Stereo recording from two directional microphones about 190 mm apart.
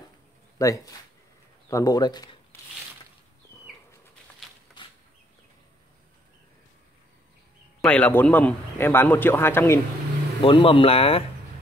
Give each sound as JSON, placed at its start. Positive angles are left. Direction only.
{"t": 0.6, "sound": "a man's voice", "side_deg": 15}
{"t": 4.4, "sound": "a sound", "side_deg": 0}
{"t": 7.8, "sound": "a man's voice", "side_deg": 5}
{"t": 10.4, "sound": "speech", "side_deg": 25}